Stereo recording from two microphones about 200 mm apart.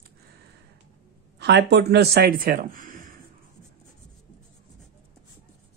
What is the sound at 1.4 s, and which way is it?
Speech, 60° right (ahead or behind).